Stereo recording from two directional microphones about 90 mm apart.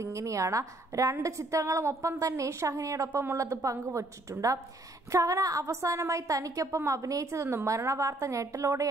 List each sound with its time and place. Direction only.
0.0 s a woman's voice: 35° right (ahead or behind)